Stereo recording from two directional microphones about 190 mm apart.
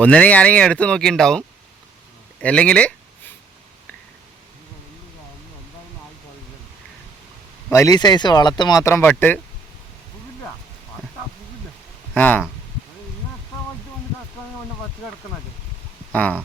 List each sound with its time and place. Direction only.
0.0 s speech: 5° left (ahead or behind)
7.7 s speech: 15° left (ahead or behind)
12.1 s speech: 10° left (ahead or behind)
16.1 s speech: 10° left (ahead or behind)